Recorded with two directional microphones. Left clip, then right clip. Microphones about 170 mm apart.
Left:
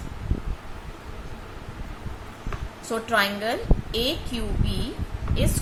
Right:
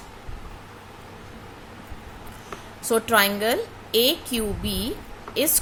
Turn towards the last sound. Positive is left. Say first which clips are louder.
# right 4 dB
turn(degrees=-60)  # may be behind; listen again after turning